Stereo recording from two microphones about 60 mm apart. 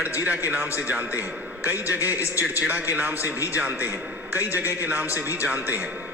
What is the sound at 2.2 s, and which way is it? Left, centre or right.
Speech, left.